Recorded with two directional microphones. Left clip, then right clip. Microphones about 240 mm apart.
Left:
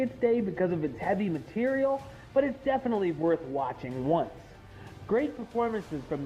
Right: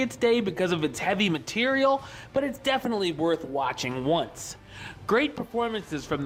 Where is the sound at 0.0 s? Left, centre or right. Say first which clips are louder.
Right 3 dB; right.